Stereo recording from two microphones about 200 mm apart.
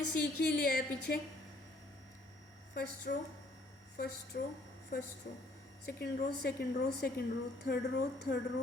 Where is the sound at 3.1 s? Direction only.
55° left (ahead or behind).